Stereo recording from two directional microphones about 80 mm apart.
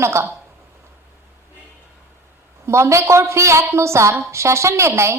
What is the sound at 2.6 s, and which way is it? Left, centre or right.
A woman's voice, right.